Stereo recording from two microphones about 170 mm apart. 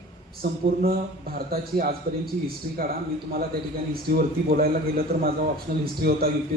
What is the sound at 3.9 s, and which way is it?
Speech, 60° right (ahead or behind).